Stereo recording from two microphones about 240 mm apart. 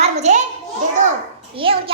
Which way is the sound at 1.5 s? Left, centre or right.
Right.